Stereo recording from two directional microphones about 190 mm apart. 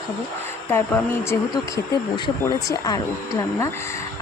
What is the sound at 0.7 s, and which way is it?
Speech, 10° left (ahead or behind).